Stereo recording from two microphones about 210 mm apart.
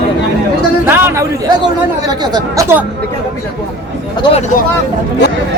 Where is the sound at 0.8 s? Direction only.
10° right (ahead or behind).